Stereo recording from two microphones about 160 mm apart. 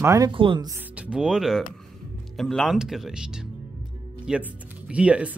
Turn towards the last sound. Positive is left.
turn(degrees=-10)  # may be behind; listen again after turning